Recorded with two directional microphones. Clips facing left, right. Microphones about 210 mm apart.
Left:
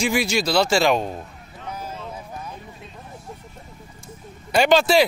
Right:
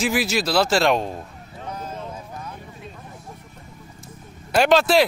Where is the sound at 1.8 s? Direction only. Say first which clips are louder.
Even; 10° left (ahead or behind).